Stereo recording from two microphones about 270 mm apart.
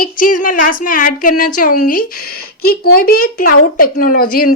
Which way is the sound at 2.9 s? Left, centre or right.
Left.